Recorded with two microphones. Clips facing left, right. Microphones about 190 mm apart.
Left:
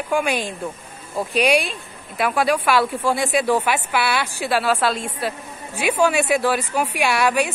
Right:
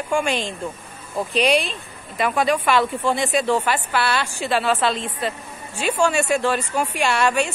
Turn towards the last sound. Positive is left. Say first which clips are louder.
# left 1 dB
turn(degrees=5)  # may be behind; listen again after turning